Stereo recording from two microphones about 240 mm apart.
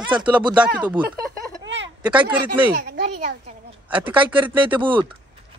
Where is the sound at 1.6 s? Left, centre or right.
Right.